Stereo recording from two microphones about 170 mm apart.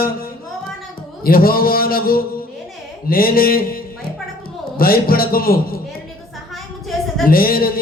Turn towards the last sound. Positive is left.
turn(degrees=60)  # may be behind; listen again after turning